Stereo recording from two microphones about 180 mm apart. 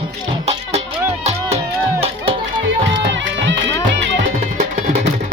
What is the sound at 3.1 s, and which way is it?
Music, 85° right.